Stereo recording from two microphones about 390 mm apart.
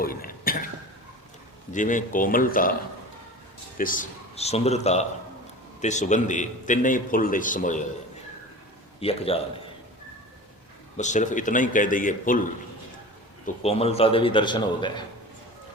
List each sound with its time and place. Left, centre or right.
0.0 s a sound: left
1.7 s a man's voice: centre
3.8 s a man's voice: left
9.0 s a man's voice: centre
10.9 s a man's voice: centre
13.4 s a man's voice: centre